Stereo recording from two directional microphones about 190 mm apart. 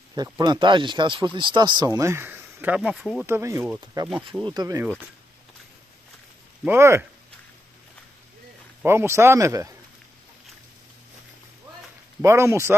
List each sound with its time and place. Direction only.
0.1 s speech: 20° right (ahead or behind); by 3.3 s centre (ahead or behind)
3.3 s speech: 15° right (ahead or behind)
6.6 s speech: 10° right (ahead or behind)
8.8 s speech: 15° right (ahead or behind)
12.2 s speech: 15° right (ahead or behind)